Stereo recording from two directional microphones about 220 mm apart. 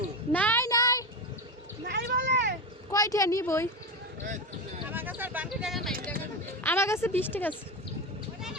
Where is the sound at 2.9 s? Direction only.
15° left (ahead or behind).